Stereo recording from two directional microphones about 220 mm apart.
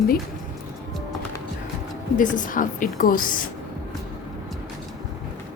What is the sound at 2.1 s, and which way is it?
A woman's voice, 35° left (ahead or behind).